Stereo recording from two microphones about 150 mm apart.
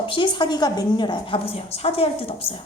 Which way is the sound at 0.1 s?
30° left (ahead or behind).